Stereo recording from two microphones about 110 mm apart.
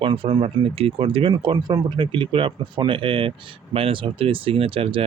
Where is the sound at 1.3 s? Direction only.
40° right (ahead or behind).